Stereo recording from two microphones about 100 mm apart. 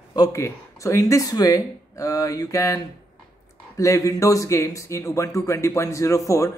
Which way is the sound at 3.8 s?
35° left (ahead or behind).